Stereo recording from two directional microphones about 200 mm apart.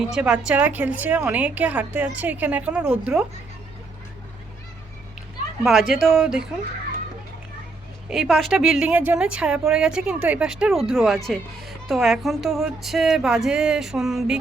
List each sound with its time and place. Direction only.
0.1 s a woman's voice: 5° right (ahead or behind)
5.6 s a woman's voice: 5° right (ahead or behind)
8.1 s a woman's voice: centre (ahead or behind)